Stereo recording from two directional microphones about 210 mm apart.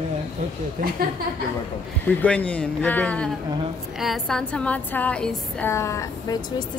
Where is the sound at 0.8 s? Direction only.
40° right (ahead or behind).